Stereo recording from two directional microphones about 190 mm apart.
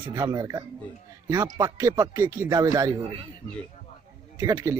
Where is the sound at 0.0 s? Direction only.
20° right (ahead or behind).